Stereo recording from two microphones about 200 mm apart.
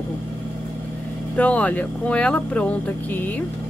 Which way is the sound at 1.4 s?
5° left (ahead or behind).